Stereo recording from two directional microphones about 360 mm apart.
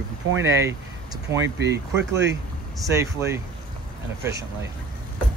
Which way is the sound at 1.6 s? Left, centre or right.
Right.